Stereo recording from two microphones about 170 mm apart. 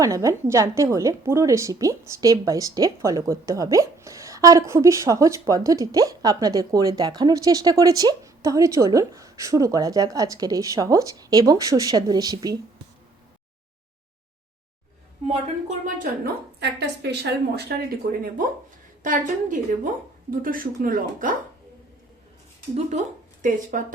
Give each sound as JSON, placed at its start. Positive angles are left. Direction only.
{"t": 0.0, "sound": "a woman's voice", "side_deg": -20}
{"t": 15.3, "sound": "a woman's voice", "side_deg": -45}
{"t": 16.6, "sound": "a woman's voice", "side_deg": -85}
{"t": 19.0, "sound": "a woman's voice", "side_deg": -50}
{"t": 22.7, "sound": "speech", "side_deg": -45}